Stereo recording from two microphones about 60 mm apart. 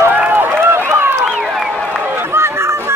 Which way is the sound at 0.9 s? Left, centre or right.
Right.